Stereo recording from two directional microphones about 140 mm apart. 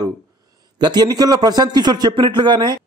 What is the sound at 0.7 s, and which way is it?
A man's voice, 30° right (ahead or behind).